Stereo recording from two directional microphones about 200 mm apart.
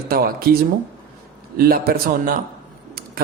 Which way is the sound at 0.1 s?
50° right (ahead or behind).